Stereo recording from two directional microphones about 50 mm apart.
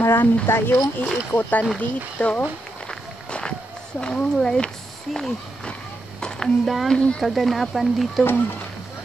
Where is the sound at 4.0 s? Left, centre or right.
Centre.